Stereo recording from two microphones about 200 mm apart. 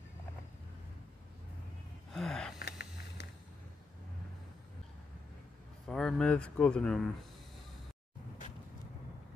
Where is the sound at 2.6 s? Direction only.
55° left (ahead or behind).